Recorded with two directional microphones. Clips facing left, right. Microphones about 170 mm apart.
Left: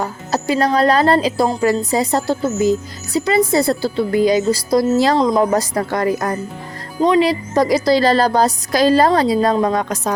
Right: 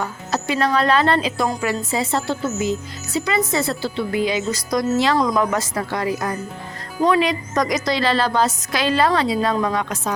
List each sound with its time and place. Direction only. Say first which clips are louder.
0.0 s speech: left 4 dB; 35° left (ahead or behind)
5.1 s speech: left 4 dB; 25° left (ahead or behind); by 6.3 s 45° left (ahead or behind)
7.2 s speech: left 5 dB; 30° left (ahead or behind)